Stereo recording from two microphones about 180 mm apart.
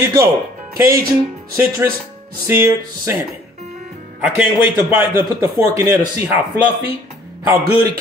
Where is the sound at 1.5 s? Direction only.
15° right (ahead or behind).